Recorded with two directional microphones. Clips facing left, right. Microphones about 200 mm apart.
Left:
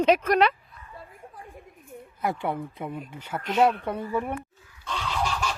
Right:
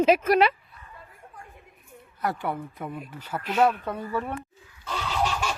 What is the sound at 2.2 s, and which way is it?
Speech, 20° left (ahead or behind).